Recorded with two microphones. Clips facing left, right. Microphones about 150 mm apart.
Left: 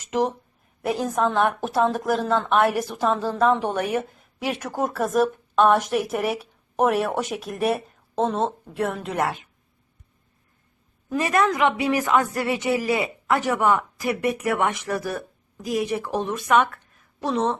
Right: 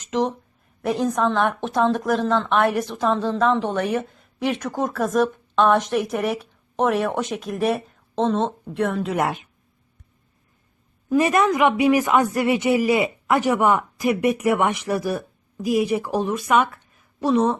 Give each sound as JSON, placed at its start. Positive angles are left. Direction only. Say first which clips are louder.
{"t": 0.1, "sound": "a woman's voice", "louder": "right 1 dB", "side_deg": 5}
{"t": 9.1, "sound": "a woman's voice", "louder": "left 1 dB", "side_deg": -15}
{"t": 11.1, "sound": "a woman's voice", "louder": "right 3 dB", "side_deg": -20}